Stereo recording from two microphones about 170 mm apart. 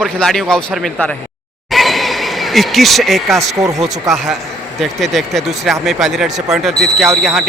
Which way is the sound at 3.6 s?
20° right (ahead or behind).